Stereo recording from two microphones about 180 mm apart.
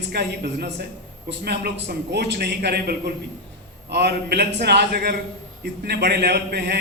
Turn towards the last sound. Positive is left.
turn(degrees=-65)  # may be behind; listen again after turning